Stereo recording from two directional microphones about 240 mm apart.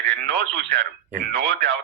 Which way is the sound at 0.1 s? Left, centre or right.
Right.